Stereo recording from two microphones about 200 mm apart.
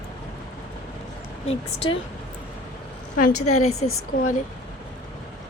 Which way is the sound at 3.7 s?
90° left.